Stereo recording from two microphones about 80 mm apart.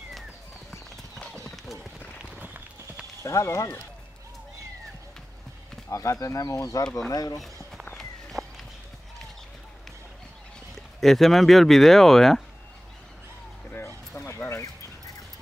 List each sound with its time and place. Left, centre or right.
1.2 s clip-clop: centre
3.2 s speech: left
5.9 s speech: left
8.0 s walk: centre
11.0 s speech: centre
14.2 s a sound: left